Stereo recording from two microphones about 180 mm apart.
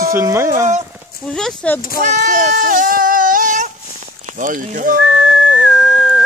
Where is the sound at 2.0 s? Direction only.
45° right (ahead or behind).